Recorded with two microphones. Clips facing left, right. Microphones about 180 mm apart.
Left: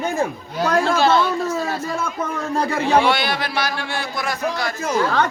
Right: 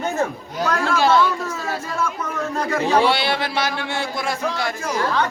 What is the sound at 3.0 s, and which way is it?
A man's voice, 30° right (ahead or behind).